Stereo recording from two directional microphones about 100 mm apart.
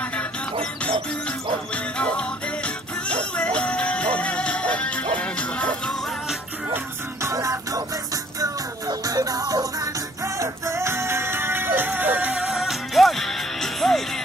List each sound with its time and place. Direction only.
2.0 s music: 10° left (ahead or behind)
6.7 s music: 30° right (ahead or behind); by 14.0 s 5° left (ahead or behind)